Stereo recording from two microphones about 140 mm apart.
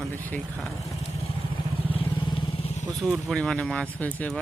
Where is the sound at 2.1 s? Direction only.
35° left (ahead or behind).